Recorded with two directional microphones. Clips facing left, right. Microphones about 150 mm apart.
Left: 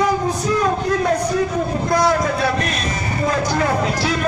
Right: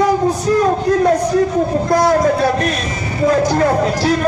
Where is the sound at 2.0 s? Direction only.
40° right (ahead or behind).